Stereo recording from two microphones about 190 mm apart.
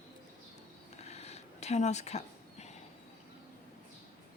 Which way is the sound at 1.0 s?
35° left (ahead or behind).